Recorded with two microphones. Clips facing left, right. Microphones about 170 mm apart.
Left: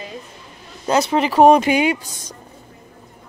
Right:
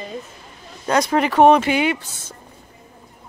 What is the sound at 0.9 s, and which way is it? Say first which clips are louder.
Speech: left 1 dB; 25° left (ahead or behind).